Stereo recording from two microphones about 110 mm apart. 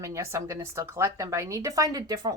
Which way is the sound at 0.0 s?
25° right (ahead or behind).